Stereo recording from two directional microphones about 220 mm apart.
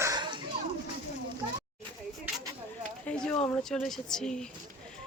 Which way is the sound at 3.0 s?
5° left (ahead or behind).